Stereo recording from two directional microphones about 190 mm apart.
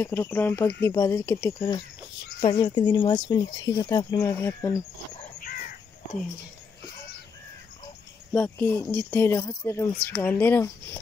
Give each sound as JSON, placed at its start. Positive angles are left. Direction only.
{"t": 0.0, "sound": "speech", "side_deg": 10}
{"t": 8.3, "sound": "speech", "side_deg": 10}